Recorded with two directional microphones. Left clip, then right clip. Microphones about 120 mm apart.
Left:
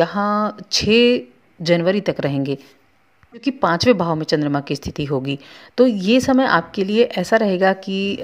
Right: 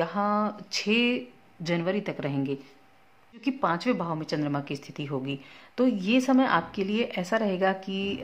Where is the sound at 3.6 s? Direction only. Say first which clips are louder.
Left 12 dB; 55° left (ahead or behind).